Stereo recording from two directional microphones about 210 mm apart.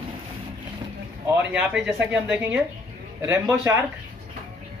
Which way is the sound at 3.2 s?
15° right (ahead or behind).